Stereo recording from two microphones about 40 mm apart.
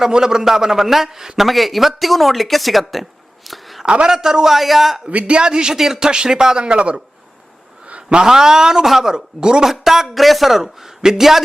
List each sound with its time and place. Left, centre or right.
0.0 s speech: centre
1.5 s speech: centre
3.8 s a man's voice: right
4.1 s speech: centre
5.1 s a man's voice: right
7.9 s a sound: right
8.3 s speech: centre
9.8 s speech: centre